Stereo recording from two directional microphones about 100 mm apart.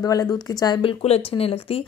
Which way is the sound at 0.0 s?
40° left (ahead or behind).